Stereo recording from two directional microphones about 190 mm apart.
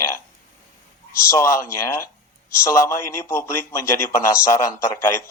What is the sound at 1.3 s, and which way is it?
Speech, 15° left (ahead or behind).